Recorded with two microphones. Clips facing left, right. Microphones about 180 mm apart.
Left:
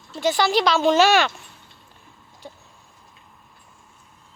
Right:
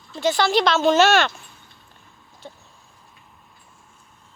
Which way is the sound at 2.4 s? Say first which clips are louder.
Even; 10° left (ahead or behind).